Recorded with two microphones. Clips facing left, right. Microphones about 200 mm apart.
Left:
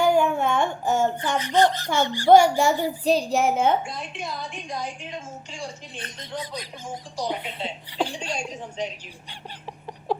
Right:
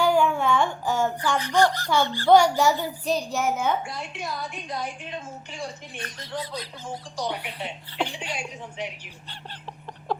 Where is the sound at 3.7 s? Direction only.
20° left (ahead or behind).